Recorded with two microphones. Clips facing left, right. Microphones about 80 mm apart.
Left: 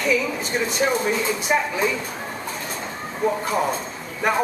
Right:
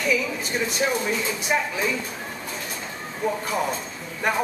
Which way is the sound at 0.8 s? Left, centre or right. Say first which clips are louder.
Left 3 dB; left.